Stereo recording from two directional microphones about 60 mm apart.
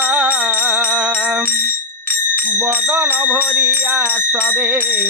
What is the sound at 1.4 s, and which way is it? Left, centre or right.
Bicycle bell, left.